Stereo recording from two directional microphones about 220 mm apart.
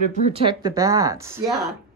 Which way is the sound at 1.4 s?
Centre (ahead or behind).